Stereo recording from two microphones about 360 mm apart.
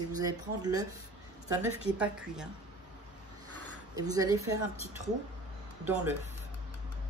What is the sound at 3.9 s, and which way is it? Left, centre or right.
Speech, centre.